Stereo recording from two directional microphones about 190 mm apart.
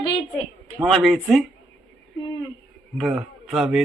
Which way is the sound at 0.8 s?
Centre (ahead or behind).